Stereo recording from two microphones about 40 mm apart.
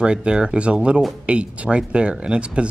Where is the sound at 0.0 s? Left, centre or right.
Right.